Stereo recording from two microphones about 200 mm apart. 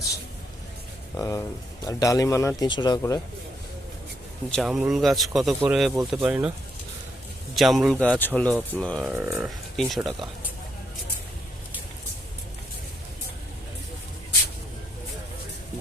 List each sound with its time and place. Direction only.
1.1 s speech: 15° left (ahead or behind)
4.5 s speech: centre (ahead or behind)
7.5 s speech: centre (ahead or behind)
9.1 s speech: 10° right (ahead or behind)